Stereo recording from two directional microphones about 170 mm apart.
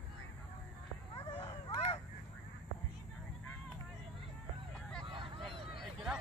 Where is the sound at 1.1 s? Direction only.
30° left (ahead or behind).